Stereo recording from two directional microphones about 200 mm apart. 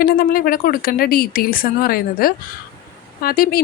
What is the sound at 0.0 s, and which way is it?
A woman's voice, 45° left (ahead or behind).